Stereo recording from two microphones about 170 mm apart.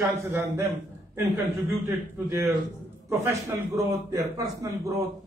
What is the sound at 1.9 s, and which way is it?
A man's voice, 15° right (ahead or behind).